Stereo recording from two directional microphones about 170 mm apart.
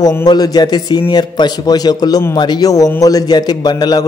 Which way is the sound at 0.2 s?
25° left (ahead or behind).